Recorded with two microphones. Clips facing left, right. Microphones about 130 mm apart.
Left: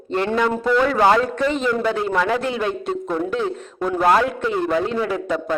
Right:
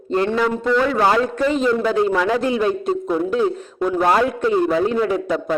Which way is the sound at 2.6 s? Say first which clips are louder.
Right 4 dB; 30° right (ahead or behind).